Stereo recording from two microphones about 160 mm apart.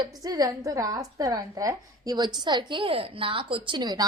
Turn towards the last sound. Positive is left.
turn(degrees=-25)  # may be behind; listen again after turning